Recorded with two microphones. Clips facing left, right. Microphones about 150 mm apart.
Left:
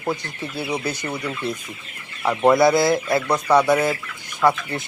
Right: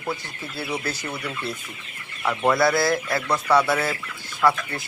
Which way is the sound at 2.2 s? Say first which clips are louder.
Left 5 dB; 20° left (ahead or behind).